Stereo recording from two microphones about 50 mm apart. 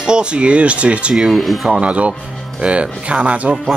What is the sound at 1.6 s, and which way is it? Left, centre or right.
Speech, right.